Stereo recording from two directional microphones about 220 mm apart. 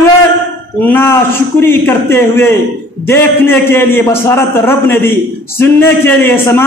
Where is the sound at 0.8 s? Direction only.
10° left (ahead or behind).